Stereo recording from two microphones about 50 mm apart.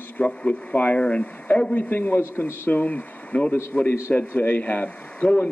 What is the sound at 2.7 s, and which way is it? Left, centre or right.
Speech, left.